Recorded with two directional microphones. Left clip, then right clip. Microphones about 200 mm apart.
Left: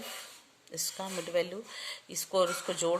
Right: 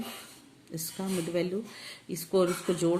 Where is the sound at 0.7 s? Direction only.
25° left (ahead or behind).